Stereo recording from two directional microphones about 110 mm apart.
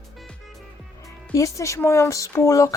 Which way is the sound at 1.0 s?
30° left (ahead or behind).